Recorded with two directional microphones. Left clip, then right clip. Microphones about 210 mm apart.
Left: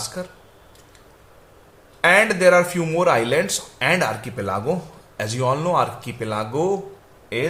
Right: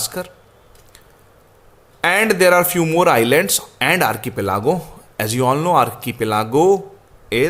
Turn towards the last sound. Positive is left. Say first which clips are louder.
# right 7 dB
turn(degrees=-50)  # may be behind; listen again after turning